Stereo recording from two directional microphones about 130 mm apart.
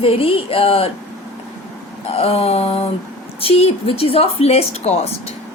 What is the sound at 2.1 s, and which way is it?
A woman's voice, 50° left (ahead or behind).